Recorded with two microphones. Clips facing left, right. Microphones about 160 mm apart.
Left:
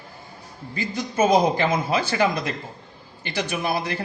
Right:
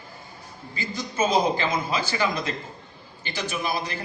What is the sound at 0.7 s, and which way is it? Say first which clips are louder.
A man's voice: left 5 dB; 60° left (ahead or behind).